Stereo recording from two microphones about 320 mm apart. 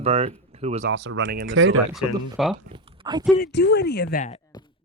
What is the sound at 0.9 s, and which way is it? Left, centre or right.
Speech, right.